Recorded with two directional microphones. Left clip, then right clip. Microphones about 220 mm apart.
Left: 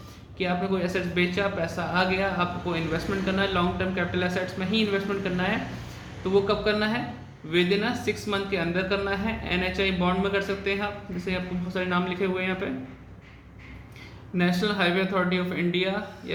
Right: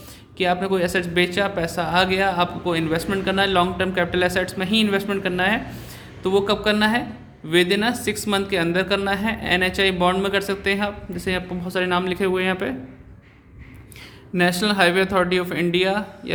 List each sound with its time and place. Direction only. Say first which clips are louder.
0.3 s speech: right 7 dB; 50° right (ahead or behind)
14.3 s speech: right 7 dB; 50° right (ahead or behind)